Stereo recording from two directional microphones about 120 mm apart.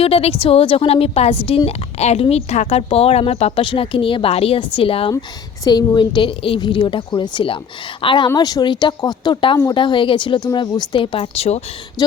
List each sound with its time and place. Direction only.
0.0 s speech: 55° left (ahead or behind)
5.6 s speech: 35° left (ahead or behind); by 11.6 s 60° left (ahead or behind)
12.0 s a sound: 35° left (ahead or behind)